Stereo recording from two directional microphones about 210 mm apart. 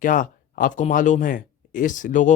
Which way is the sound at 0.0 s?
40° left (ahead or behind).